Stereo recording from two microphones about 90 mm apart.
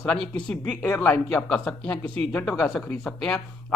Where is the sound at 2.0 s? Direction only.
85° right.